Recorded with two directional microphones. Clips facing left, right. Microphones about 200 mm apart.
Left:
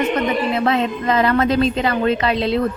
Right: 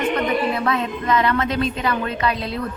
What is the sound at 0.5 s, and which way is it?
A woman's voice, 25° left (ahead or behind).